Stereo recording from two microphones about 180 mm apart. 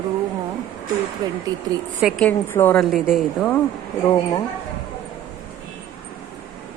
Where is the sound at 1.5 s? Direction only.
20° right (ahead or behind).